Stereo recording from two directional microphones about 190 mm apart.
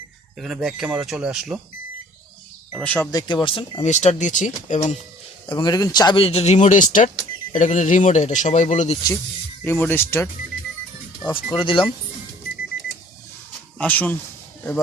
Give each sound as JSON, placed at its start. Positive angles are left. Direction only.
{"t": 0.3, "sound": "speech", "side_deg": 0}
{"t": 2.8, "sound": "speech", "side_deg": 5}
{"t": 3.1, "sound": "speech", "side_deg": 20}
{"t": 3.8, "sound": "speech", "side_deg": 40}
{"t": 5.5, "sound": "speech", "side_deg": 20}
{"t": 9.6, "sound": "speech", "side_deg": 10}
{"t": 11.5, "sound": "speech", "side_deg": 25}
{"t": 13.7, "sound": "speech", "side_deg": 10}